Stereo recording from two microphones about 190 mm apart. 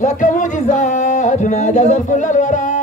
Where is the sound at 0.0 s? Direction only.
40° left (ahead or behind).